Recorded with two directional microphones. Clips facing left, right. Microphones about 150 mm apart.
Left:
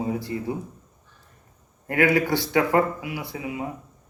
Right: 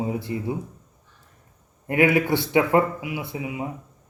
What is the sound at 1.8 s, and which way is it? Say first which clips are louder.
Speech: right 1 dB; 20° right (ahead or behind).